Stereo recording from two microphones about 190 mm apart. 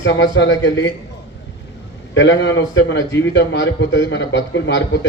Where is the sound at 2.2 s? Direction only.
75° left (ahead or behind).